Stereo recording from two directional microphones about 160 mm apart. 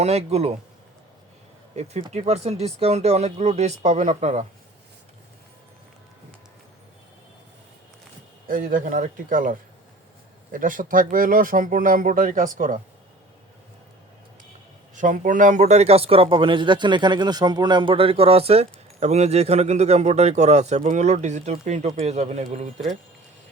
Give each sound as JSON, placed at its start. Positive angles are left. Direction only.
{"t": 0.0, "sound": "speech", "side_deg": -40}
{"t": 1.7, "sound": "speech", "side_deg": -40}
{"t": 8.4, "sound": "speech", "side_deg": -60}
{"t": 14.9, "sound": "speech", "side_deg": -55}